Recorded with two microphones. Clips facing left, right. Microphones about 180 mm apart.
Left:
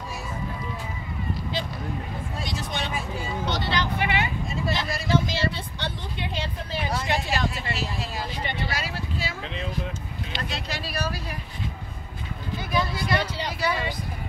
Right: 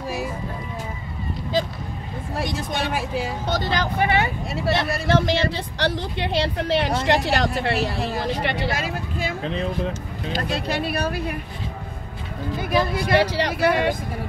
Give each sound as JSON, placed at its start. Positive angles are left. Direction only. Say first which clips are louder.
{"t": 2.9, "sound": "speech", "louder": "right 6 dB", "side_deg": -80}
{"t": 3.4, "sound": "speech", "louder": "right 1 dB", "side_deg": -45}
{"t": 4.6, "sound": "speech", "louder": "right 7 dB", "side_deg": -65}
{"t": 8.7, "sound": "speech", "louder": "right 4 dB", "side_deg": -50}
{"t": 10.3, "sound": "speech", "louder": "right 9 dB", "side_deg": -55}
{"t": 12.6, "sound": "speech", "louder": "right 5 dB", "side_deg": -60}